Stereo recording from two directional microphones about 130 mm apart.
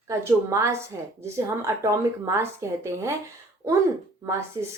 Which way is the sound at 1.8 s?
20° right (ahead or behind).